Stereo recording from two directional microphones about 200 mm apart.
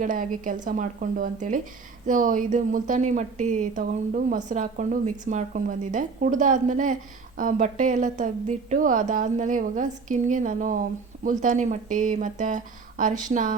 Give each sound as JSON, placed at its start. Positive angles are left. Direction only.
{"t": 0.0, "sound": "a woman's voice", "side_deg": -40}